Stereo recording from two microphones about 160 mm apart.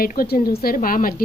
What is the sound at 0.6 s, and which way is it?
Speech, 60° left (ahead or behind).